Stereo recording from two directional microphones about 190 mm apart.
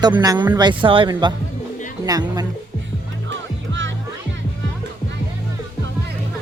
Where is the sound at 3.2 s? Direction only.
75° right (ahead or behind).